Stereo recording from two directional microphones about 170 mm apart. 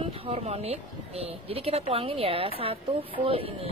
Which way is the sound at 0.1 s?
35° right (ahead or behind).